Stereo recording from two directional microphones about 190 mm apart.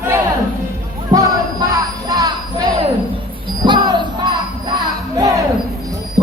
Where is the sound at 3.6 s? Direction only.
25° right (ahead or behind).